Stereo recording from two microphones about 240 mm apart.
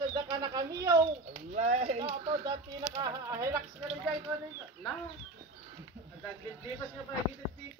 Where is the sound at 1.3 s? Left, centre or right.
Right.